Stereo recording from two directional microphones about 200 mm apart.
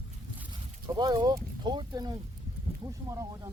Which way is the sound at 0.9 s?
20° right (ahead or behind).